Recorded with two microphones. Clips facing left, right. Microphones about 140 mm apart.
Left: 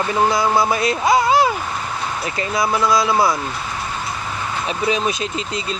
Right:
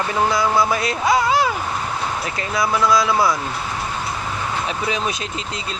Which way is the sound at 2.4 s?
15° left (ahead or behind).